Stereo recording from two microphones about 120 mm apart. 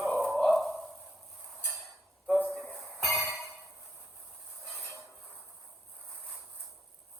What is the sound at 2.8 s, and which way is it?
Music, centre (ahead or behind).